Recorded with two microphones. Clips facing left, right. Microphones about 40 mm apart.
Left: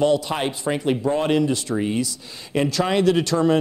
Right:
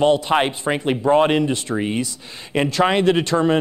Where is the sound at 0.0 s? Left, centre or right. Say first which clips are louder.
Right 4 dB; right.